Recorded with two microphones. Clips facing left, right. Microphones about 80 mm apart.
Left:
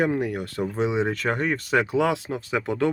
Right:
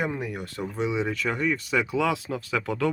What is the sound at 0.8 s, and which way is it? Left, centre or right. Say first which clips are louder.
Speech: left 2 dB; left.